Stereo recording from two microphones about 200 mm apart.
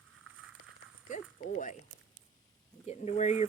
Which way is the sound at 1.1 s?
40° left (ahead or behind).